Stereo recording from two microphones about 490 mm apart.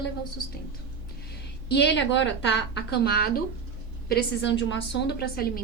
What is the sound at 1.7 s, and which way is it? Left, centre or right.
A woman's voice, left.